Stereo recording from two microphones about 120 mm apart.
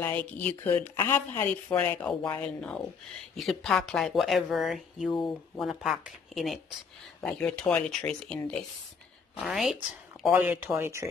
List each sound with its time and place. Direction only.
0.0 s speech: 10° left (ahead or behind)
10.3 s speech: 15° right (ahead or behind)